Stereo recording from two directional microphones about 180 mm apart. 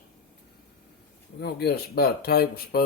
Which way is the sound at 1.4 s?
60° left (ahead or behind).